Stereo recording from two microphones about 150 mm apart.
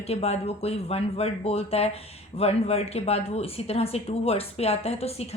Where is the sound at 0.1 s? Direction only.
45° left (ahead or behind).